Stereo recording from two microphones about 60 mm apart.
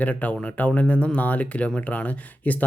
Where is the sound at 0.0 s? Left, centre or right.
Left.